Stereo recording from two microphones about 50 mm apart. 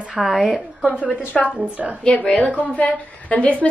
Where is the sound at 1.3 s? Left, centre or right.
Left.